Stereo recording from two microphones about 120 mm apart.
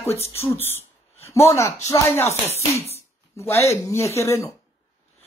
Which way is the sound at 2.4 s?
60° left (ahead or behind).